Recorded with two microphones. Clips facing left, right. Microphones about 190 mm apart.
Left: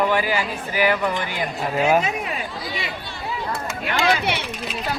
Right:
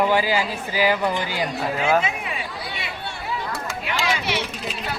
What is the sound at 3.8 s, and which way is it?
Speech, 55° left (ahead or behind).